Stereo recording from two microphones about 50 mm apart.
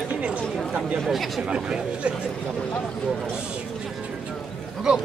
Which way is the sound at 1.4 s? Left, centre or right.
Centre.